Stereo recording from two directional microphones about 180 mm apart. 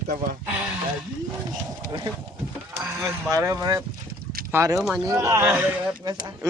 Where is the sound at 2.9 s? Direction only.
15° right (ahead or behind).